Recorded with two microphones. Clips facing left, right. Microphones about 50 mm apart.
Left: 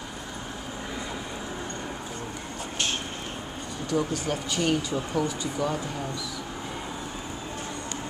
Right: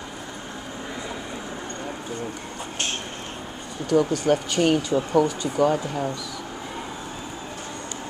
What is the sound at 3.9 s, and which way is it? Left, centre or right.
Speech, right.